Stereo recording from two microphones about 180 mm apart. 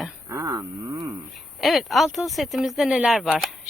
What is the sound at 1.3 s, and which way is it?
Speech, centre (ahead or behind).